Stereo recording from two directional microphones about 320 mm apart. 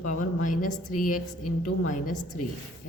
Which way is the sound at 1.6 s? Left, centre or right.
Left.